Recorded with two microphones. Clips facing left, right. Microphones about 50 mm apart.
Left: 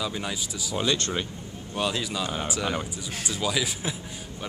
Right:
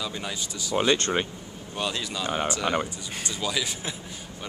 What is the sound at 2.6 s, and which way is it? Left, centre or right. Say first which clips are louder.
Speech: right 1 dB; centre.